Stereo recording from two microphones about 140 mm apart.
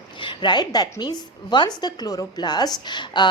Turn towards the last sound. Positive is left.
turn(degrees=35)  # may be behind; listen again after turning